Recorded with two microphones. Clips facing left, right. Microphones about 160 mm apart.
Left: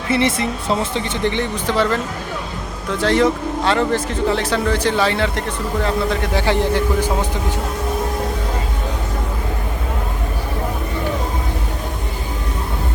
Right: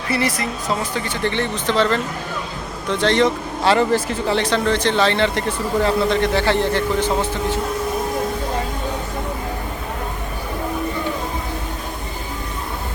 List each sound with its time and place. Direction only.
0.1 s speech: 25° left (ahead or behind)